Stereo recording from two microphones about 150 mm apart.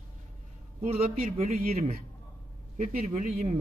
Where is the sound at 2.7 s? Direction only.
50° right (ahead or behind).